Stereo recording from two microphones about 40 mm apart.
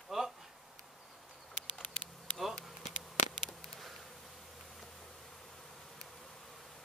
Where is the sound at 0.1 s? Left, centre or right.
Centre.